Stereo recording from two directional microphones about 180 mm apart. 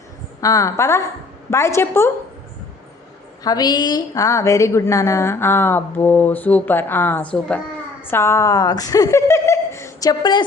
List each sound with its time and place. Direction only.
0.4 s a woman's voice: 15° left (ahead or behind)
3.4 s a woman's voice: 20° left (ahead or behind)